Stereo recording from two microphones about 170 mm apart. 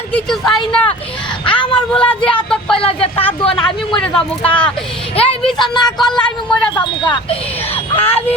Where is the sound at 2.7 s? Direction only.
35° left (ahead or behind).